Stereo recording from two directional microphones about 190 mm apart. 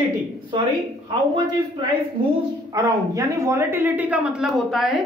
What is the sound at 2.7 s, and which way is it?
A woman's voice, 15° right (ahead or behind).